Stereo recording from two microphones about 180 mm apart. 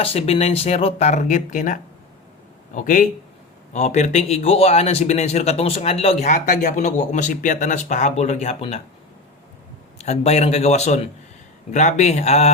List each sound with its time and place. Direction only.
0.0 s a man's voice: 35° left (ahead or behind)
10.0 s a man's voice: 35° left (ahead or behind)